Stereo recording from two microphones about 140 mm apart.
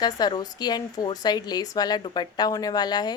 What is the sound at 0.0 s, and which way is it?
Speech, 30° left (ahead or behind).